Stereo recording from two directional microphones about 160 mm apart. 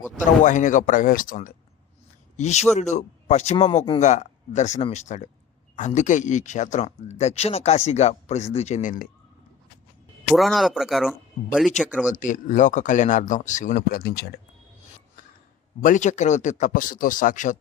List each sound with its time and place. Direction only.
0.4 s speech: 50° left (ahead or behind)
2.3 s speech: 45° left (ahead or behind)
4.0 s speech: 50° left (ahead or behind)
10.3 s speech: centre (ahead or behind)
12.1 s speech: 55° left (ahead or behind); by 14.3 s 70° left (ahead or behind)
15.8 s speech: 55° left (ahead or behind)